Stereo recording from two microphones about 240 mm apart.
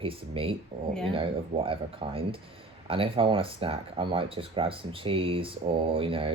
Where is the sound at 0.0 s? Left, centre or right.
Right.